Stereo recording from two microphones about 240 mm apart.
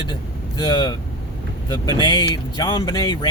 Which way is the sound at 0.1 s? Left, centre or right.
Centre.